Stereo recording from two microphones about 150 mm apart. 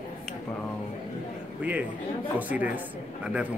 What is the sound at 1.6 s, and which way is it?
Speech, 10° right (ahead or behind).